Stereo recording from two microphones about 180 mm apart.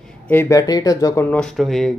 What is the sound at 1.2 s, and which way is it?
Speech, 5° left (ahead or behind).